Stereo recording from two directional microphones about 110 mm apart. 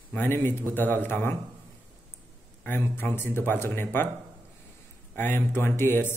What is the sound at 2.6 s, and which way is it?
A man's voice, 20° left (ahead or behind).